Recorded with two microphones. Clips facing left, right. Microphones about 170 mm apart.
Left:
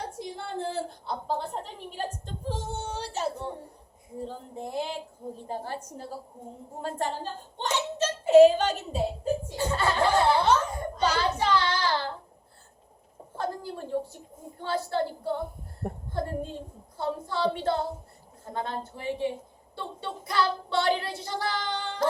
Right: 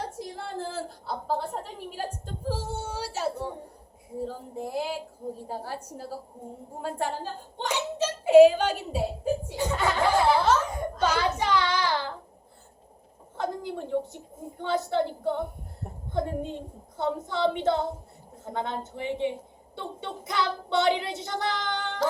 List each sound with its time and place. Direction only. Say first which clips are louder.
0.0 s a sound: right 1 dB; centre (ahead or behind)
4.4 s a child's voice: right 1 dB; 5° right (ahead or behind)
7.7 s a child's voice: even; 10° right (ahead or behind)
10.3 s laughter: even; centre (ahead or behind)
11.2 s child singing: even; 15° right (ahead or behind)
13.4 s a woman's voice: right 2 dB; 20° right (ahead or behind)
15.8 s a woman's voice: left 7 dB; 60° left (ahead or behind)
16.1 s a woman's voice: right 4 dB; 20° right (ahead or behind)